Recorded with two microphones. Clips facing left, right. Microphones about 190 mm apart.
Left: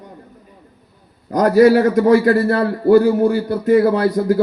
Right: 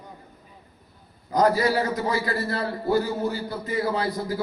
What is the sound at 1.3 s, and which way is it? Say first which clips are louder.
A man's voice: left 10 dB; 70° left (ahead or behind).